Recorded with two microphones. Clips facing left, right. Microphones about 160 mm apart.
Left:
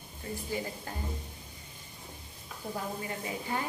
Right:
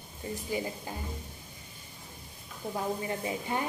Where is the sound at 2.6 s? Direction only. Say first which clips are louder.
Right 2 dB; 25° right (ahead or behind).